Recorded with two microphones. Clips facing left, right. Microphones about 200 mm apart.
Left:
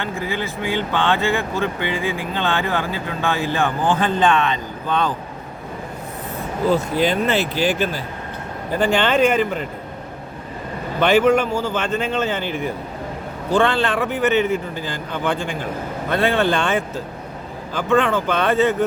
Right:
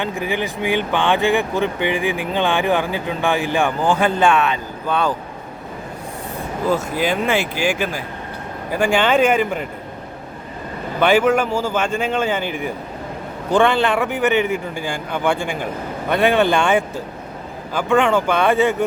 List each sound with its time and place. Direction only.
0.0 s speech: 15° right (ahead or behind)
6.7 s speech: 10° right (ahead or behind)
11.0 s speech: 10° right (ahead or behind)